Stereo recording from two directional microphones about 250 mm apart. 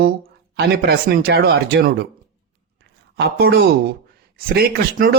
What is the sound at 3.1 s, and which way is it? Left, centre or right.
Speech, right.